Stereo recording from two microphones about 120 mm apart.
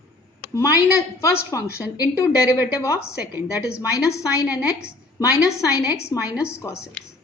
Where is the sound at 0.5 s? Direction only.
25° left (ahead or behind).